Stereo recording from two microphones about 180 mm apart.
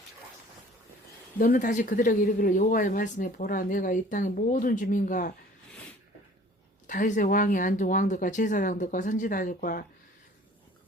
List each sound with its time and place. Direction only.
1.4 s speech: 50° left (ahead or behind)
6.8 s speech: 45° left (ahead or behind)